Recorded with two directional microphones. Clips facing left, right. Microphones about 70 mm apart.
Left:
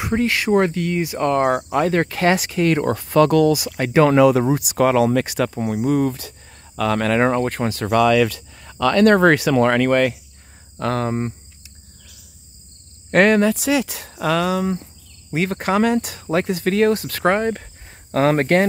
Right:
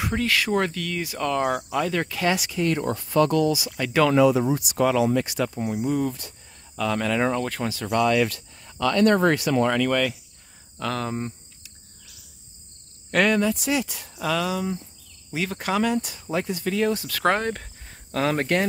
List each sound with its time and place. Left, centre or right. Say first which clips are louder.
0.0 s speech: left 4 dB; left
1.2 s speech: left 6 dB; left
2.5 s speech: left 6 dB; left
7.3 s speech: left 6 dB; left
8.5 s speech: left 5 dB; left
9.8 s speech: left 6 dB; left
13.1 s speech: left 6 dB; left
15.3 s speech: left 6 dB; left
17.2 s speech: left 2 dB; centre
18.1 s speech: left 7 dB; left